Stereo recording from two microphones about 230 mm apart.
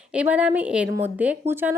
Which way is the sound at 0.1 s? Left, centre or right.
Centre.